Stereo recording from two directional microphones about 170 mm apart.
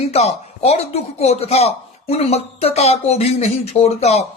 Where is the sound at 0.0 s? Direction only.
35° left (ahead or behind).